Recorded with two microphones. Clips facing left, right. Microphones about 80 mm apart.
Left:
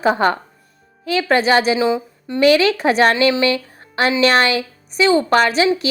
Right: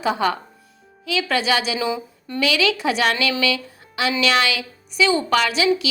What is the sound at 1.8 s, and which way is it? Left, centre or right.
Speech, left.